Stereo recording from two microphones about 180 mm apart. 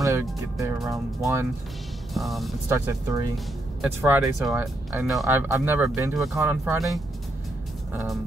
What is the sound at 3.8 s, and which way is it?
Speech, 5° right (ahead or behind).